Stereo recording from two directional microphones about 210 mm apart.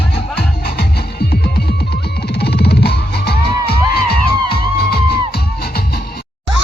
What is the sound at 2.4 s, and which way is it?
Music, 50° left (ahead or behind).